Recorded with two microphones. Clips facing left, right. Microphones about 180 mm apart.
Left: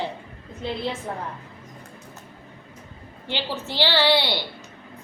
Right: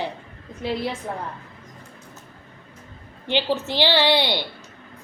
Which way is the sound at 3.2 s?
20° right (ahead or behind).